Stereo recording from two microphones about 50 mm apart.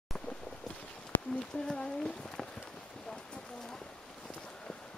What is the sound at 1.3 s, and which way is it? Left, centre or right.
Speech, centre.